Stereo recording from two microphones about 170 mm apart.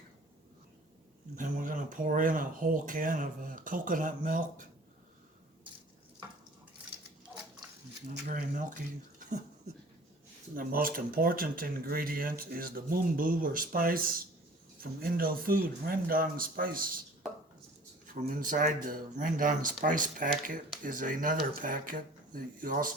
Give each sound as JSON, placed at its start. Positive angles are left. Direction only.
{"t": 1.4, "sound": "speech", "side_deg": -50}
{"t": 8.3, "sound": "speech", "side_deg": -50}
{"t": 10.5, "sound": "speech", "side_deg": -55}
{"t": 18.1, "sound": "speech", "side_deg": -55}